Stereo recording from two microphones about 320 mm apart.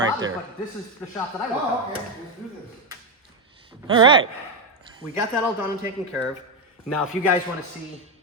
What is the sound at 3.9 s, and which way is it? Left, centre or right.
Speech, centre.